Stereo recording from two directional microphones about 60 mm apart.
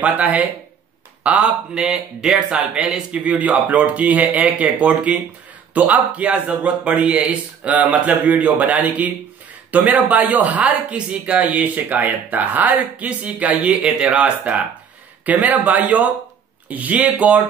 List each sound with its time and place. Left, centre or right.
0.0 s a man's voice: right
1.8 s a man's voice: centre; by 17.4 s right